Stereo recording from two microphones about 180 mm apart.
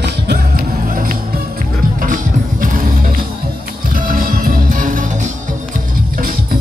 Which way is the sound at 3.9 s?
50° right (ahead or behind).